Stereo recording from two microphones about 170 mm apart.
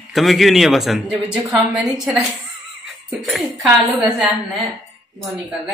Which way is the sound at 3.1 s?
Centre (ahead or behind).